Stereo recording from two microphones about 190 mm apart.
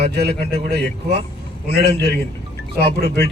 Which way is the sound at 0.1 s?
60° right (ahead or behind).